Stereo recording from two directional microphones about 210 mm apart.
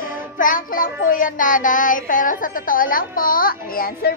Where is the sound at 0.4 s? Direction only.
40° left (ahead or behind).